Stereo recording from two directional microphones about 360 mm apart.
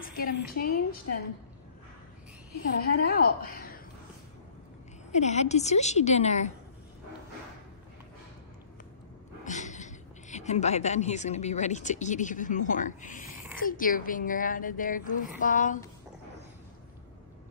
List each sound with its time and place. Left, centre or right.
0.1 s a woman's voice: left
2.8 s a woman's voice: left
5.1 s a woman's voice: centre
9.4 s a woman's voice: centre